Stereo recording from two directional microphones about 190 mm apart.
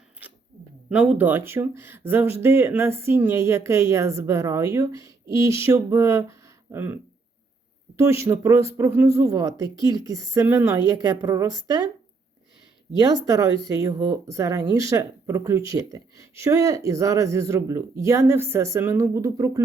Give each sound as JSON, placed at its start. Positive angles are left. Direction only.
{"t": 0.9, "sound": "speech", "side_deg": -5}
{"t": 13.2, "sound": "speech", "side_deg": -15}